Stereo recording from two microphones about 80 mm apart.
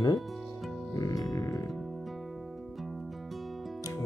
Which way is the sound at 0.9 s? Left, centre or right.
Left.